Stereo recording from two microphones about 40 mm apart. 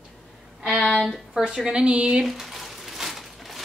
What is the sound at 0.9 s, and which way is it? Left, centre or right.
Speech, centre.